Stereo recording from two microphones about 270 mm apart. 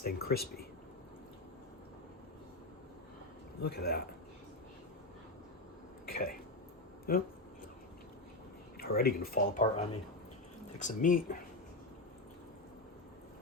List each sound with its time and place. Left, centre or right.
0.0 s speech: left
3.7 s speech: left
6.1 s a sound: left
8.8 s speech: left